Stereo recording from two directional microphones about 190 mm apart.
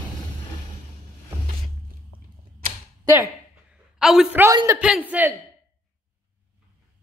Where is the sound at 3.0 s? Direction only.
15° right (ahead or behind).